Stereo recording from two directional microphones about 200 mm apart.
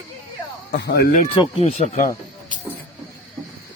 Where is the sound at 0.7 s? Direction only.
55° left (ahead or behind).